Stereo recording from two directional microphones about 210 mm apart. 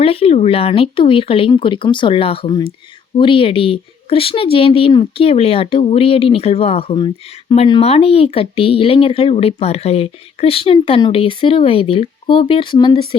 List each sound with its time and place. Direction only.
0.0 s speech: 25° left (ahead or behind)